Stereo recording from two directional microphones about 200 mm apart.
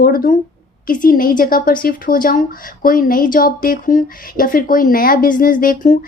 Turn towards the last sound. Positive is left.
turn(degrees=40)  # may be behind; listen again after turning